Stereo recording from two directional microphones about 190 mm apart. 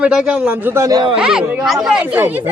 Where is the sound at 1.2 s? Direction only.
5° right (ahead or behind).